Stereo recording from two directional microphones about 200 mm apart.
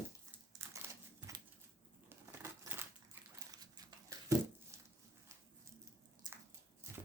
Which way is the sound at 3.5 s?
20° right (ahead or behind).